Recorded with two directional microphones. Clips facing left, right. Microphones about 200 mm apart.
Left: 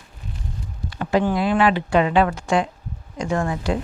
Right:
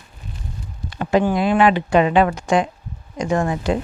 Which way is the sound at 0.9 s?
20° right (ahead or behind).